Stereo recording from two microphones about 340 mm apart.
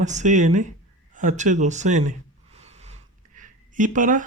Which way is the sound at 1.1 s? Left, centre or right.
Right.